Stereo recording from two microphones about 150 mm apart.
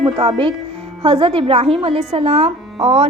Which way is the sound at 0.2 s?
35° right (ahead or behind).